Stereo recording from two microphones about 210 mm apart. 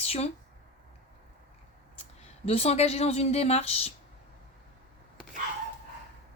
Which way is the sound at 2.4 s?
30° left (ahead or behind).